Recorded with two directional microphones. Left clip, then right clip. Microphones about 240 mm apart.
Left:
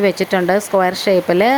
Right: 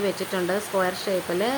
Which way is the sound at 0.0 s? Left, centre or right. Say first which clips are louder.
Left 11 dB; left.